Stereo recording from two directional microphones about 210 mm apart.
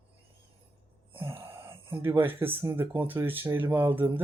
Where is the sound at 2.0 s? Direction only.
10° right (ahead or behind).